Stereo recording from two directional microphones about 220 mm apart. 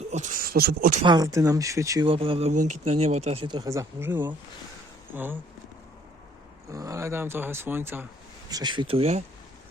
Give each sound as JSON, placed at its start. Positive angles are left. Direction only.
{"t": 0.1, "sound": "speech", "side_deg": -35}
{"t": 1.0, "sound": "speech", "side_deg": -15}
{"t": 6.7, "sound": "speech", "side_deg": -15}